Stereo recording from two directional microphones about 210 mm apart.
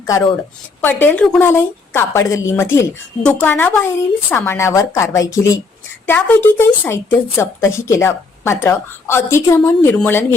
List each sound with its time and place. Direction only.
0.0 s speech: 15° left (ahead or behind)